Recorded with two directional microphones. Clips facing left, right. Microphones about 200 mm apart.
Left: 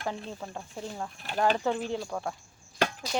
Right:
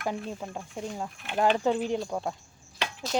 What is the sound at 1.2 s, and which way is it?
Speech, 35° left (ahead or behind).